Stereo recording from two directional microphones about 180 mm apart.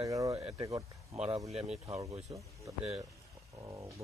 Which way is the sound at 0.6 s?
20° right (ahead or behind).